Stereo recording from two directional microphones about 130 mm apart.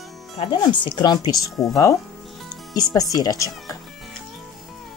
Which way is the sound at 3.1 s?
30° left (ahead or behind).